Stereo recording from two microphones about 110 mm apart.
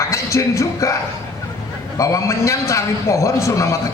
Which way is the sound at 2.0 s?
30° left (ahead or behind).